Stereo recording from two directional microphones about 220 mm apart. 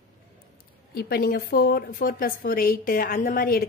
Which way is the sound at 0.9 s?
45° left (ahead or behind).